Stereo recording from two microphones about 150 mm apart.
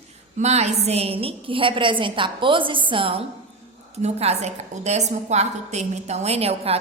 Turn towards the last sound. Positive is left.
turn(degrees=-40)  # may be behind; listen again after turning